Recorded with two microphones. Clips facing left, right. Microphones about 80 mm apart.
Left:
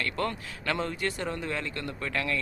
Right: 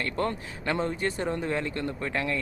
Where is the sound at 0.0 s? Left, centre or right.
Right.